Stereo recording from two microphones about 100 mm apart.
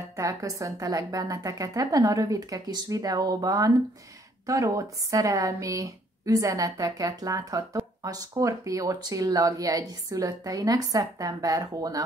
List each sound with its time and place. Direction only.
0.1 s a woman's voice: 35° right (ahead or behind)